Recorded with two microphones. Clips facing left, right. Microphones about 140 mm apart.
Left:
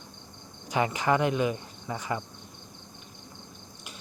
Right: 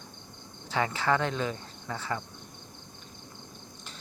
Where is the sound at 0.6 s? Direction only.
15° left (ahead or behind).